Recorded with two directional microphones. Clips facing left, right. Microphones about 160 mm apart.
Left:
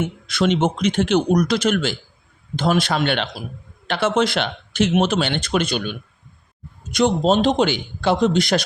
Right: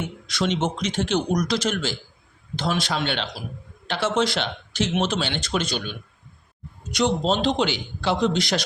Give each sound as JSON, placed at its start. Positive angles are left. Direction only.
{"t": 0.3, "sound": "a man's voice", "side_deg": 60}